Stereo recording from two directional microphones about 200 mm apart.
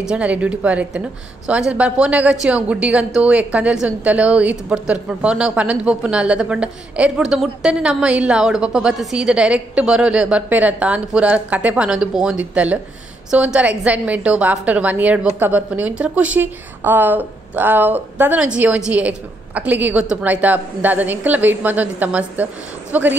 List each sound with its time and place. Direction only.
0.1 s a woman's voice: 5° right (ahead or behind)